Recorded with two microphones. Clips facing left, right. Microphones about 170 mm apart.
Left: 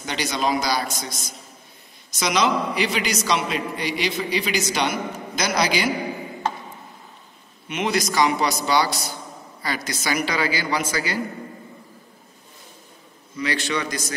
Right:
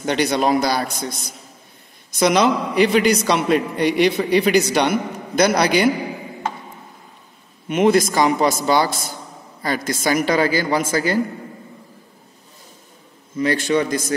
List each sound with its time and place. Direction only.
0.0 s a man's voice: 60° right (ahead or behind)
7.6 s a woman's voice: 45° right (ahead or behind)
13.4 s a woman's voice: 50° right (ahead or behind)